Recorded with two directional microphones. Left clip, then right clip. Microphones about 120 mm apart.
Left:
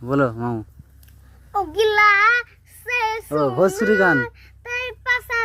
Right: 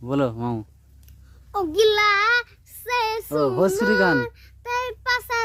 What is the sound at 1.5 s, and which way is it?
Child singing, 30° right (ahead or behind).